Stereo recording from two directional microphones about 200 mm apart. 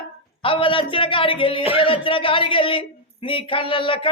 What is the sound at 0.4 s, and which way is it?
A man's voice, 25° left (ahead or behind).